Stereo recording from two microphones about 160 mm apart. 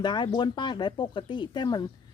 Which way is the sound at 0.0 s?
30° left (ahead or behind).